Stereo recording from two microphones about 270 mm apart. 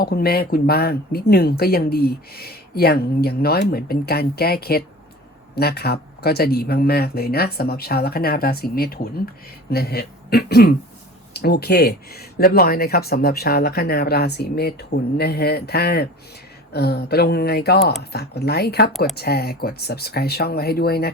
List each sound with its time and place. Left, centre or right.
0.0 s speech: left